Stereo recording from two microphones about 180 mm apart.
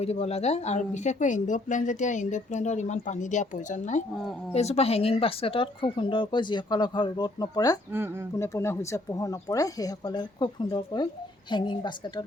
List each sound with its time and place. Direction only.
0.0 s speech: 35° left (ahead or behind)